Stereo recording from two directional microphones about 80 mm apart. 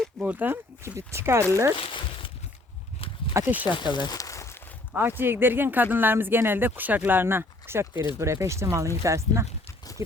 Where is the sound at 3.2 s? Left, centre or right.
Left.